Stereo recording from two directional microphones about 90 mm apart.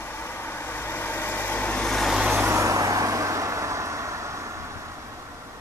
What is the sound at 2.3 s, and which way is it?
Vehicle, 30° right (ahead or behind).